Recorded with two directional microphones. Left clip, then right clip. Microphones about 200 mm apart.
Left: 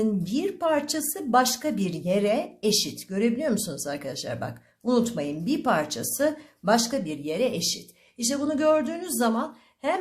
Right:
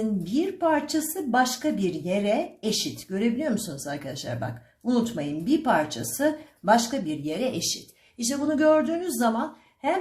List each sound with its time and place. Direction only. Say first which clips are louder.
0.3 s a woman's voice: right 2 dB; 40° left (ahead or behind)